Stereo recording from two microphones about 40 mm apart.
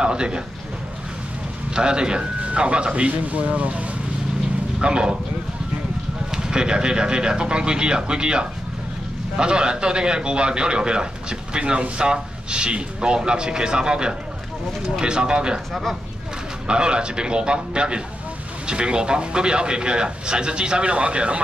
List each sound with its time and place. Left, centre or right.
0.0 s a man's voice: right
1.8 s a man's voice: right
4.7 s a man's voice: right
6.3 s a man's voice: centre
16.6 s a man's voice: right